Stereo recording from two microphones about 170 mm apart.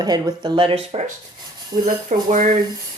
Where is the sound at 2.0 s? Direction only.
45° right (ahead or behind).